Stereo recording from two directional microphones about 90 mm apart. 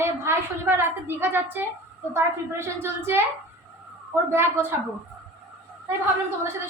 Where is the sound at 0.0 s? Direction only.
25° right (ahead or behind).